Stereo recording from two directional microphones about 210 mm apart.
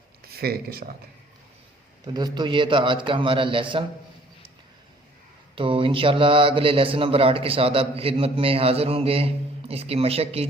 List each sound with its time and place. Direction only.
0.3 s speech: 45° right (ahead or behind)
2.0 s a man's voice: 20° right (ahead or behind)
5.5 s a man's voice: 25° right (ahead or behind)